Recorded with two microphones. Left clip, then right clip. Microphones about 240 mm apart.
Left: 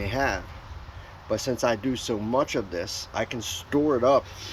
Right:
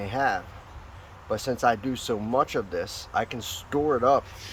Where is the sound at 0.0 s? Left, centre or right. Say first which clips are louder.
Right 1 dB; centre.